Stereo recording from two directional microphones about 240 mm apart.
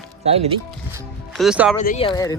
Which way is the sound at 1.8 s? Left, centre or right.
Left.